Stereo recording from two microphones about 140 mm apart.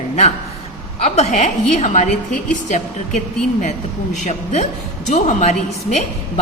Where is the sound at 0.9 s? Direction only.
50° left (ahead or behind).